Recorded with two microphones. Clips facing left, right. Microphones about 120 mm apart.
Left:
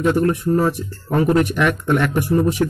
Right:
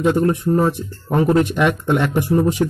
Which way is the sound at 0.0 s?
20° right (ahead or behind).